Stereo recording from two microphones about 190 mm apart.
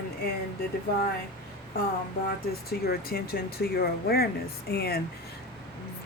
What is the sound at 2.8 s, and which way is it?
Speech, 55° left (ahead or behind).